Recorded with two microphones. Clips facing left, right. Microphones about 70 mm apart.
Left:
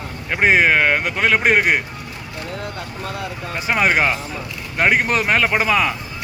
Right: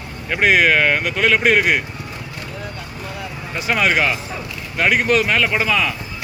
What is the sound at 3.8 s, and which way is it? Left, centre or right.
Speech, left.